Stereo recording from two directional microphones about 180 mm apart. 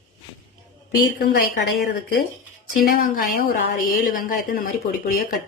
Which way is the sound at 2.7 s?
50° left (ahead or behind).